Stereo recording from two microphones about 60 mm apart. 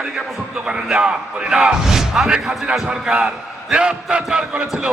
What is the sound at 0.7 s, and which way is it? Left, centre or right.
A man's voice, centre.